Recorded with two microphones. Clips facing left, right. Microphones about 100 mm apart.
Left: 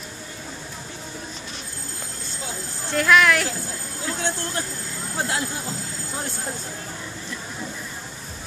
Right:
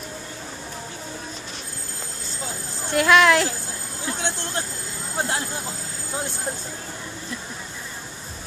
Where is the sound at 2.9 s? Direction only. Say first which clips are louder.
Right 2 dB; 25° right (ahead or behind).